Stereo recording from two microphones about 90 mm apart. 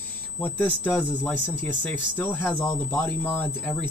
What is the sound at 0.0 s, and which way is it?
Speech, 20° left (ahead or behind).